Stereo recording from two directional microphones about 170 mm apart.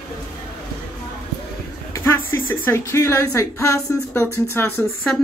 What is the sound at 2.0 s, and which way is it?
Speech, 15° left (ahead or behind).